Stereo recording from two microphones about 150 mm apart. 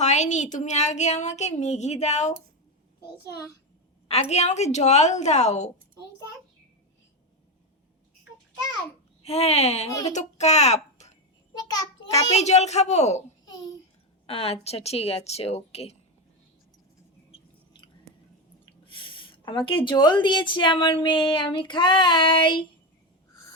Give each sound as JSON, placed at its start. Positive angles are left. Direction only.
{"t": 0.0, "sound": "speech", "side_deg": 50}
{"t": 4.1, "sound": "speech", "side_deg": 45}
{"t": 9.2, "sound": "a child's voice", "side_deg": 45}
{"t": 11.5, "sound": "a child's voice", "side_deg": 25}
{"t": 12.3, "sound": "speech", "side_deg": 50}
{"t": 13.4, "sound": "a sound", "side_deg": 25}
{"t": 14.3, "sound": "speech", "side_deg": 40}
{"t": 18.6, "sound": "a woman's voice", "side_deg": 35}